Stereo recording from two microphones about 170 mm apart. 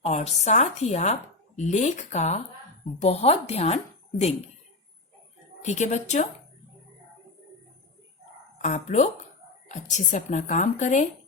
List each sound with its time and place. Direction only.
0.0 s a woman's voice: 40° left (ahead or behind)
5.6 s speech: 45° left (ahead or behind)
8.6 s speech: 45° left (ahead or behind)